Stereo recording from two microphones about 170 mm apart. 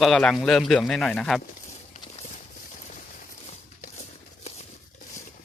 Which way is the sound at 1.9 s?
45° left (ahead or behind).